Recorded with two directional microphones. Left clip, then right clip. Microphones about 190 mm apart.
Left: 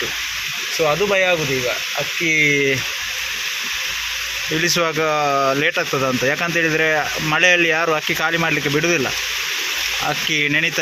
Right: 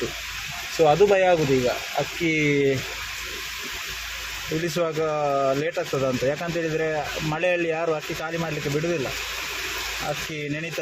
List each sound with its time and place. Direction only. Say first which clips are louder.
0.9 s speech: even; 20° right (ahead or behind)
4.6 s speech: left 6 dB; centre (ahead or behind); by 8.5 s 20° left (ahead or behind)
10.3 s speech: left 13 dB; 10° left (ahead or behind)